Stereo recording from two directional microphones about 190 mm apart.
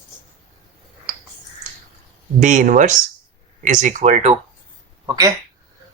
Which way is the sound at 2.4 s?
40° right (ahead or behind).